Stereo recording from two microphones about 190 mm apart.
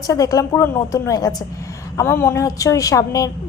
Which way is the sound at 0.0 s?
20° left (ahead or behind).